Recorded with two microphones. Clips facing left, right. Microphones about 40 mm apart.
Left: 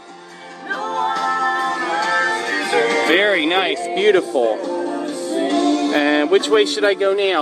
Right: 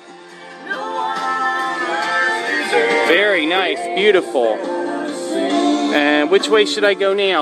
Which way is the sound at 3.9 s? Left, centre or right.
Right.